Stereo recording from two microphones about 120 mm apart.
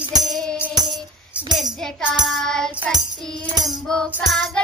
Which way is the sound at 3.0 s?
35° right (ahead or behind).